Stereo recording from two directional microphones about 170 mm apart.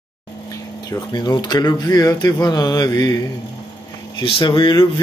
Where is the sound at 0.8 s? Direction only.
25° left (ahead or behind).